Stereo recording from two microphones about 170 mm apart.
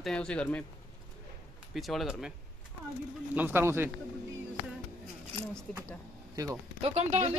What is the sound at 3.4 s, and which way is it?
Speech, 10° right (ahead or behind).